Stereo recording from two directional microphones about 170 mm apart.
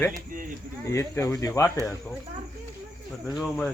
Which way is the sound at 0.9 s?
15° left (ahead or behind).